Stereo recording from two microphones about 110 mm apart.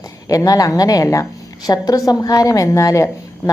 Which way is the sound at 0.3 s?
35° left (ahead or behind).